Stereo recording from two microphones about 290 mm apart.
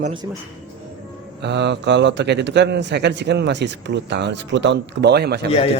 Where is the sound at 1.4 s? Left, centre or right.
Right.